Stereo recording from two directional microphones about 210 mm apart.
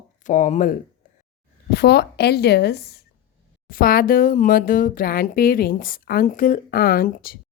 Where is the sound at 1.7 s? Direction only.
50° left (ahead or behind).